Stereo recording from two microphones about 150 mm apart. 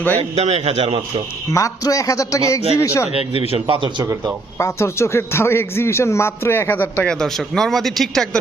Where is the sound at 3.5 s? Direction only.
35° right (ahead or behind).